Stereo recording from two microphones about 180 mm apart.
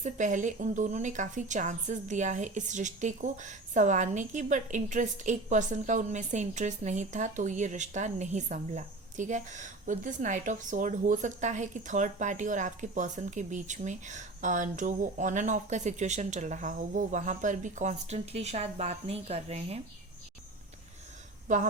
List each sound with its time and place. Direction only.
0.0 s a woman's voice: 45° right (ahead or behind)
21.4 s speech: 45° right (ahead or behind)